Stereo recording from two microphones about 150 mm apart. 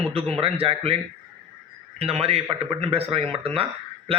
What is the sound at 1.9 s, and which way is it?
A man's voice, 45° right (ahead or behind).